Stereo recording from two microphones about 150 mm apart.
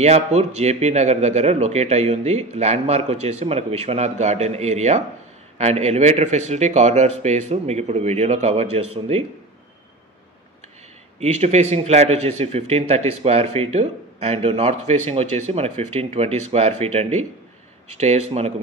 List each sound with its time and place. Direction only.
0.0 s speech: 45° right (ahead or behind)
11.1 s speech: 50° right (ahead or behind)